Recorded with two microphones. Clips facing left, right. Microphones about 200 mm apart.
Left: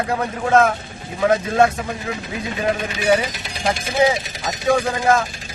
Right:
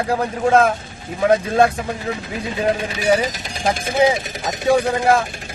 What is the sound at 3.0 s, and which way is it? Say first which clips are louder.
Speech: even; 35° right (ahead or behind).